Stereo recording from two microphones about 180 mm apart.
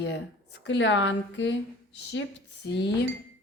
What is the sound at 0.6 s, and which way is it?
Speech, 90° left.